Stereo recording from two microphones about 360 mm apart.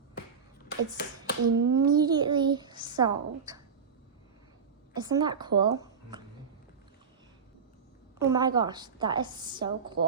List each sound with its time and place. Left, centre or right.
0.6 s finger snapping: left
1.6 s a child's voice: centre
4.9 s a child's voice: centre
8.2 s a child's voice: centre